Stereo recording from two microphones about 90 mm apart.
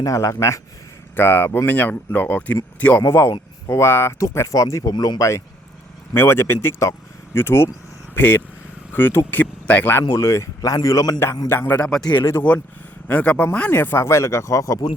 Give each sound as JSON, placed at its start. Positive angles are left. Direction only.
{"t": 0.0, "sound": "speech", "side_deg": 35}
{"t": 1.1, "sound": "speech", "side_deg": 25}
{"t": 4.8, "sound": "speech", "side_deg": 50}
{"t": 6.1, "sound": "speech", "side_deg": 25}
{"t": 10.1, "sound": "speech", "side_deg": 30}
{"t": 11.4, "sound": "speech", "side_deg": 20}
{"t": 12.4, "sound": "speech", "side_deg": 20}